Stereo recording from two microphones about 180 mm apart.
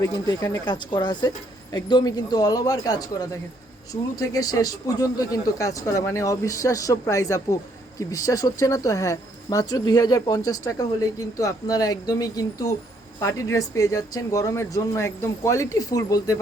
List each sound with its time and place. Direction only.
0.0 s speech: 20° left (ahead or behind)